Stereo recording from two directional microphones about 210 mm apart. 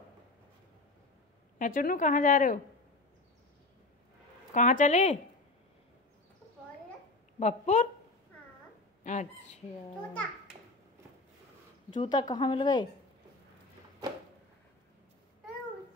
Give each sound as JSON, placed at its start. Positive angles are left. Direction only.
{"t": 1.6, "sound": "a woman's voice", "side_deg": 40}
{"t": 4.6, "sound": "a woman's voice", "side_deg": 35}
{"t": 7.3, "sound": "a woman's voice", "side_deg": 35}
{"t": 9.0, "sound": "a woman's voice", "side_deg": 35}
{"t": 11.9, "sound": "speech", "side_deg": 20}